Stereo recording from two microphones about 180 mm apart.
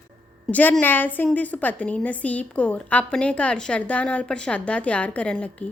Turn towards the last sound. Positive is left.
turn(degrees=5)  # may be behind; listen again after turning